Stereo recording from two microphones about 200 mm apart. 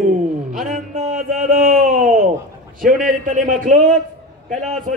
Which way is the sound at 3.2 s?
40° right (ahead or behind).